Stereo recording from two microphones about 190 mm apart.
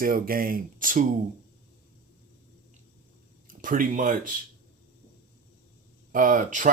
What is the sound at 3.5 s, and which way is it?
Speech, 45° right (ahead or behind).